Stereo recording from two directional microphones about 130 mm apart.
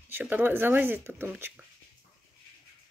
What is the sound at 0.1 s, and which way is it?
Speech, 15° right (ahead or behind).